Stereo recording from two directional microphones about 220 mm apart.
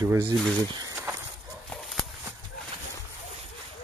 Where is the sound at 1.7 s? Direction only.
Centre (ahead or behind).